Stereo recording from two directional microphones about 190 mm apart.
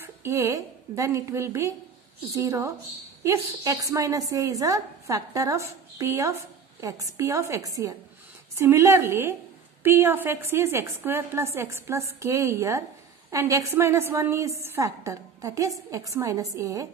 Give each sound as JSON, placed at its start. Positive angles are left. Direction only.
{"t": 0.0, "sound": "a woman's voice", "side_deg": -15}